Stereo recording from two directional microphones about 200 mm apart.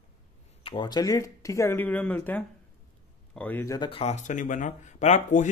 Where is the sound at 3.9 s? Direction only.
30° left (ahead or behind).